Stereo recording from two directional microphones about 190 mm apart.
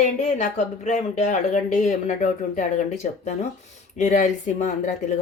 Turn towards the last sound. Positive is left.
turn(degrees=40)  # may be behind; listen again after turning